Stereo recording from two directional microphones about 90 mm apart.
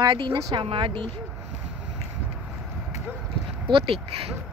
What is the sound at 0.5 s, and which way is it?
Speech, 70° right (ahead or behind).